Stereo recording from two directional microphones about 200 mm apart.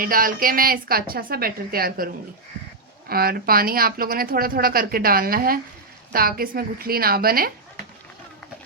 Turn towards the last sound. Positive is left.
turn(degrees=-50)  # may be behind; listen again after turning